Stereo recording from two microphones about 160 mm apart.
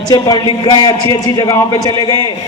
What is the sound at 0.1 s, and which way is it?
A man's voice, 25° left (ahead or behind).